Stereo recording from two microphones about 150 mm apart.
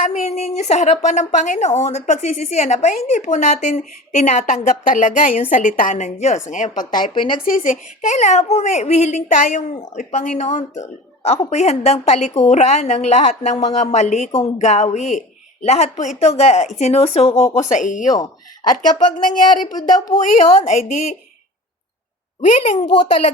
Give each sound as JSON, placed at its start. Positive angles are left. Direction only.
{"t": 0.0, "sound": "a woman's voice", "side_deg": 50}
{"t": 7.1, "sound": "speech", "side_deg": 30}
{"t": 7.4, "sound": "a woman's voice", "side_deg": 65}
{"t": 18.1, "sound": "speech", "side_deg": 25}
{"t": 19.2, "sound": "a woman's voice", "side_deg": 60}
{"t": 19.6, "sound": "speech", "side_deg": 30}
{"t": 20.6, "sound": "a woman's voice", "side_deg": 50}
{"t": 22.4, "sound": "a woman's voice", "side_deg": 50}